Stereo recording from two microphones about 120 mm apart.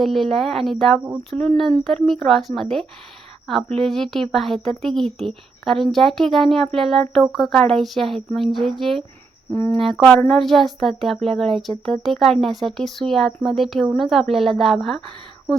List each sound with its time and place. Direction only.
0.0 s speech: centre (ahead or behind)
9.5 s speech: 15° left (ahead or behind)
9.7 s speech: centre (ahead or behind)